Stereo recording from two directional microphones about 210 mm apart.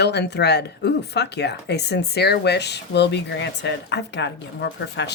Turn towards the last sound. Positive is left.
turn(degrees=55)  # may be behind; listen again after turning